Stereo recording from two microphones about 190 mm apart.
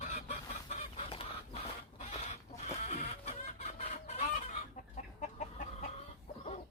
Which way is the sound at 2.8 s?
35° left (ahead or behind).